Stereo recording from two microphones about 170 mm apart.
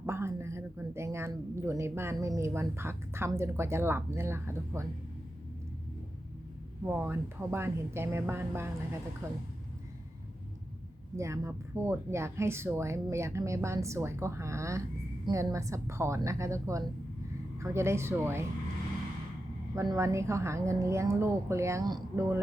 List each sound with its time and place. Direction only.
0.0 s a woman's voice: 15° right (ahead or behind)
6.8 s a woman's voice: 15° right (ahead or behind)
11.2 s a woman's voice: 15° right (ahead or behind)
19.7 s a woman's voice: 20° right (ahead or behind)